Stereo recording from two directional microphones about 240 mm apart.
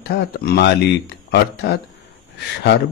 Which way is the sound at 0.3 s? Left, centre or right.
Left.